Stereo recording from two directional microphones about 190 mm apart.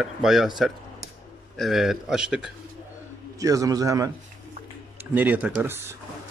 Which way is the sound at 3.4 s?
15° right (ahead or behind).